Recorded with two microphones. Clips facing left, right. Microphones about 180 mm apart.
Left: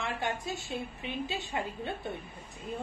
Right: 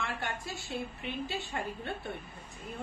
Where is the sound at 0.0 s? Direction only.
20° left (ahead or behind).